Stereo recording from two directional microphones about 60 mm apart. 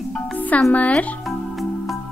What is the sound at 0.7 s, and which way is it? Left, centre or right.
Speech, left.